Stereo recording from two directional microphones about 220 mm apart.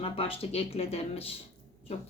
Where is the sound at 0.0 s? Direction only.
25° left (ahead or behind).